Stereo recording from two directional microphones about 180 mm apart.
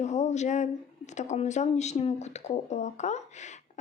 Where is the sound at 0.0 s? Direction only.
40° left (ahead or behind).